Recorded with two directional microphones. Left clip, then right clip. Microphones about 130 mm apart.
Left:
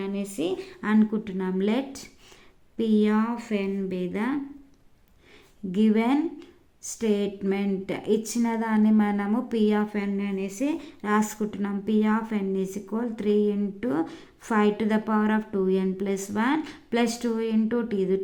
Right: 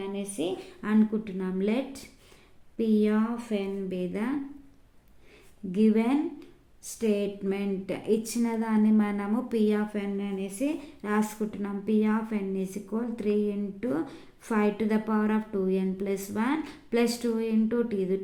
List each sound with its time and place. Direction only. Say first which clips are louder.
0.0 s speech: left 2 dB; 40° left (ahead or behind)
5.7 s speech: left 2 dB; 35° left (ahead or behind)